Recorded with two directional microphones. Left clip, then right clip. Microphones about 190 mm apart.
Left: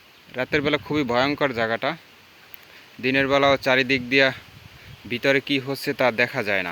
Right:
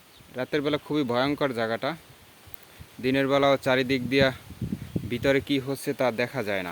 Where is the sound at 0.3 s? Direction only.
5° left (ahead or behind).